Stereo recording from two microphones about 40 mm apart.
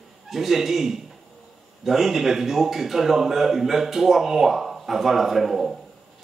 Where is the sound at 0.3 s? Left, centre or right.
Centre.